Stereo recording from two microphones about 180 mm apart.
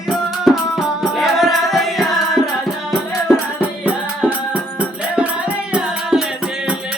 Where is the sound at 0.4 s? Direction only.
Centre (ahead or behind).